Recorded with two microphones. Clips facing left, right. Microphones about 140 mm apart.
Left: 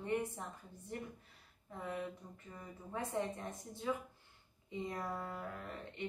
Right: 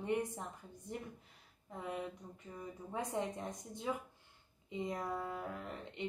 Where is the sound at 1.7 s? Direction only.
15° right (ahead or behind).